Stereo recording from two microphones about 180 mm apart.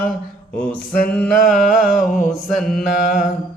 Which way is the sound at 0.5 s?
10° left (ahead or behind).